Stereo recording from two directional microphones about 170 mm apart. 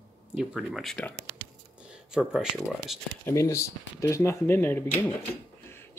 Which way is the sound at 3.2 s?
15° left (ahead or behind).